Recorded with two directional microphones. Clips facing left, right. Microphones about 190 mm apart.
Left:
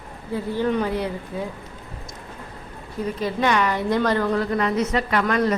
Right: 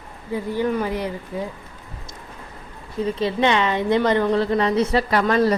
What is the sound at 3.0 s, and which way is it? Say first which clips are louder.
A woman's voice: right 3 dB; 25° right (ahead or behind).